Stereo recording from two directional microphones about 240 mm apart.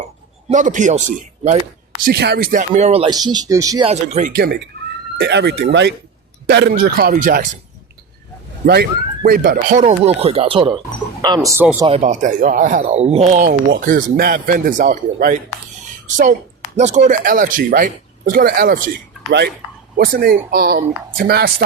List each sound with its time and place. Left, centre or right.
0.5 s speech: right; by 3.9 s centre
4.0 s speech: right
8.6 s speech: right; by 11.9 s centre
11.9 s speech: right
20.0 s speech: right